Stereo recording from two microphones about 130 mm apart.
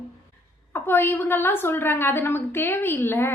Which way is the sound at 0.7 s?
15° left (ahead or behind).